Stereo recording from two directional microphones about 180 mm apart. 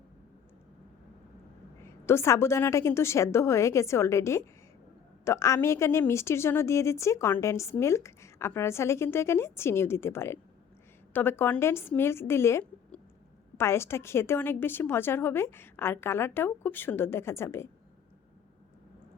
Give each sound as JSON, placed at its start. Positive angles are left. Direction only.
{"t": 1.8, "sound": "a woman's voice", "side_deg": 15}